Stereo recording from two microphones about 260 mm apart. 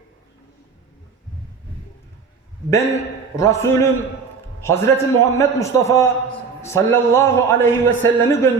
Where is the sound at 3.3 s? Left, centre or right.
Centre.